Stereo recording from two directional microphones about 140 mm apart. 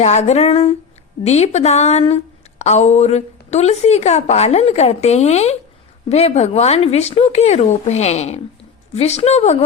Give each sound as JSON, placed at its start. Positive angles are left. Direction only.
{"t": 0.0, "sound": "a woman's voice", "side_deg": 55}